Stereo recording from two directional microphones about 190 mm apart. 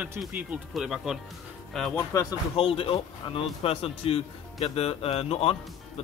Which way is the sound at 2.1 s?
15° left (ahead or behind).